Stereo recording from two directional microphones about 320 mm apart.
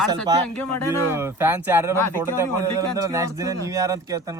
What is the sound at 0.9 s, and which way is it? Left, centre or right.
A man's voice, centre.